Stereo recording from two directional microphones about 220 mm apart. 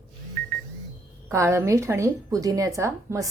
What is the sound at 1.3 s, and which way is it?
A woman's voice, 10° right (ahead or behind).